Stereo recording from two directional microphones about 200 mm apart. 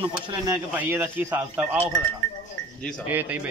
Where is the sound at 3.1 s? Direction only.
10° right (ahead or behind).